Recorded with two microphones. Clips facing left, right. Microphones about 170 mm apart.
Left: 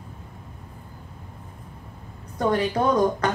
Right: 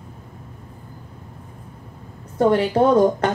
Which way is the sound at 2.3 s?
30° right (ahead or behind).